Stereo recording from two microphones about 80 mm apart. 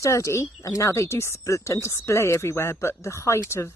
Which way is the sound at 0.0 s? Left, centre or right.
Left.